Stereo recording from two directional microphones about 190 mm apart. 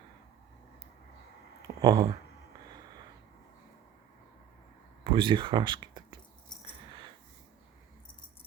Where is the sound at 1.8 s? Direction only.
25° right (ahead or behind).